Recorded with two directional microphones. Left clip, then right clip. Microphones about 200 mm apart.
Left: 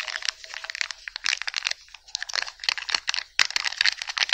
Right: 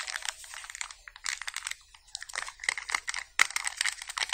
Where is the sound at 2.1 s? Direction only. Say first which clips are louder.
Left 8 dB; 20° left (ahead or behind).